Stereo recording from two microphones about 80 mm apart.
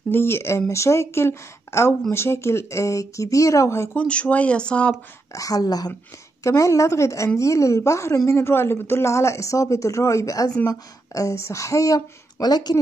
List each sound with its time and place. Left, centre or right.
0.1 s speech: left
3.9 s speech: centre
5.3 s speech: left
6.4 s speech: left